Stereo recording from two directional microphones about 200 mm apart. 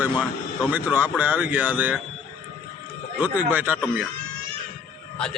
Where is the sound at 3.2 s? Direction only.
10° right (ahead or behind).